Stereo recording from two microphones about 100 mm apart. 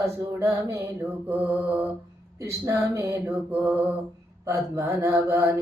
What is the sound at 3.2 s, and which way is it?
Mantra, 15° right (ahead or behind).